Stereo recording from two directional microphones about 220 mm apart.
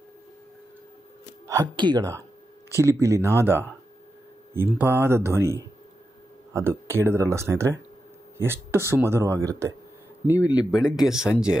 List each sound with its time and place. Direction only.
1.5 s speech: 20° right (ahead or behind)
4.6 s speech: 10° right (ahead or behind)